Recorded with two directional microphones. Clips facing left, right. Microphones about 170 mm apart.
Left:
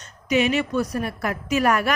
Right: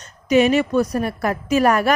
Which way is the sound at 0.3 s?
40° right (ahead or behind).